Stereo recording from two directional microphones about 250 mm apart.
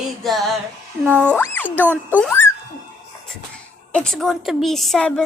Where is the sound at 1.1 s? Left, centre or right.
Centre.